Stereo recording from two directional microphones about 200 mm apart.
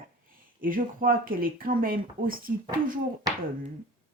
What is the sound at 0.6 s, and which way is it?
Speech, 45° right (ahead or behind).